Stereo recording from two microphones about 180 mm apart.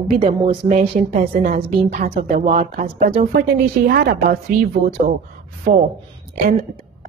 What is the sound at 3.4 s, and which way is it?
Speech, 55° right (ahead or behind).